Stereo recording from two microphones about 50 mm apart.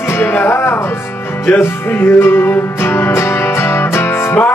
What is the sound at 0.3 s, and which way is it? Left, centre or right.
Music, left.